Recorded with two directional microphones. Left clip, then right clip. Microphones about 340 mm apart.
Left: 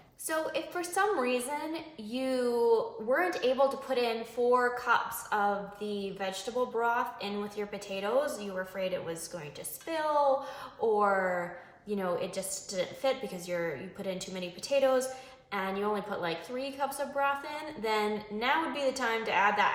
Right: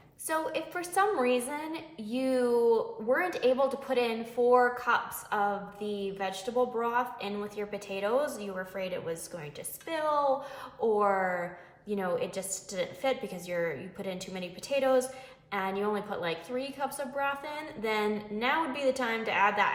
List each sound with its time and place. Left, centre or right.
0.3 s a woman's voice: centre